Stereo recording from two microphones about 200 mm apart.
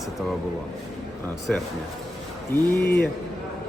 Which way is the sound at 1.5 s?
5° left (ahead or behind).